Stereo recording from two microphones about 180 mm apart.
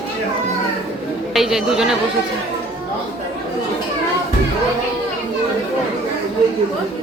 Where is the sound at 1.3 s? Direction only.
Centre (ahead or behind).